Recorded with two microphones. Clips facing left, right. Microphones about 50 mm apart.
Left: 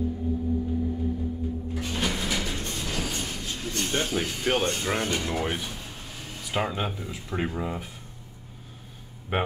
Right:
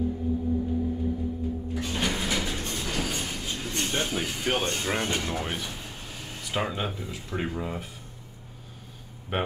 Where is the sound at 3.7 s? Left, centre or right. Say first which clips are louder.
Left 2 dB; centre.